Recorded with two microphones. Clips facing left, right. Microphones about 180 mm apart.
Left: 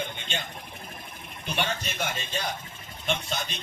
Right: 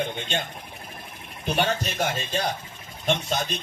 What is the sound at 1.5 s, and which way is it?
Speech, 40° right (ahead or behind).